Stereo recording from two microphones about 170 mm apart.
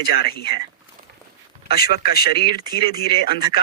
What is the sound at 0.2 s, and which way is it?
Speech, 65° left (ahead or behind).